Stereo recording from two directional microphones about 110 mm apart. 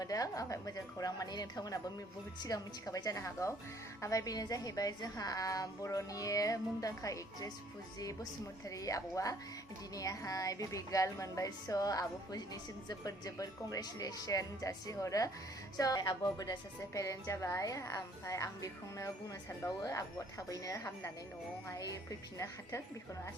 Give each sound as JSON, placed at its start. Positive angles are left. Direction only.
{"t": 0.0, "sound": "a woman's voice", "side_deg": 30}